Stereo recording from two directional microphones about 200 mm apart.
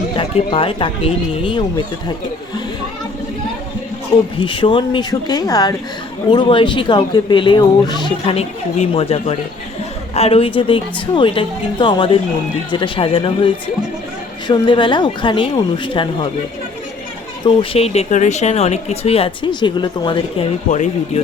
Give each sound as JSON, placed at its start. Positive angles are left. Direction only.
{"t": 0.2, "sound": "speech", "side_deg": 25}
{"t": 4.4, "sound": "speech", "side_deg": 25}
{"t": 17.4, "sound": "speech", "side_deg": 30}
{"t": 20.7, "sound": "speech", "side_deg": 40}